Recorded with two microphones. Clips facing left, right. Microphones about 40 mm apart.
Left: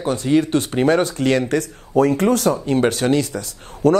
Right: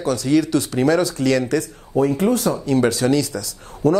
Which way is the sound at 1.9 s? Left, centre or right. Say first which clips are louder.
Left 2 dB; left.